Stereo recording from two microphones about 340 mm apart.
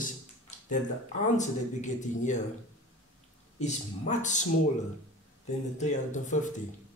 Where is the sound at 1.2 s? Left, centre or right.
Left.